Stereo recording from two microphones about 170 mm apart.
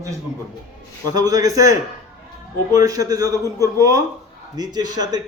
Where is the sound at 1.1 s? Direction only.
20° right (ahead or behind).